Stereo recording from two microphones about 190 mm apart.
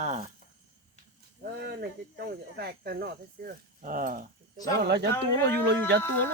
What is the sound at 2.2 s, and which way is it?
Speech, 60° right (ahead or behind).